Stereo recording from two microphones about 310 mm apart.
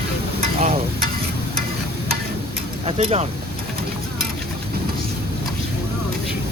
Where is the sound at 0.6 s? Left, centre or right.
Centre.